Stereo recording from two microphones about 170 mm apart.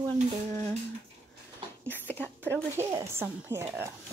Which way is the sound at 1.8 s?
10° left (ahead or behind).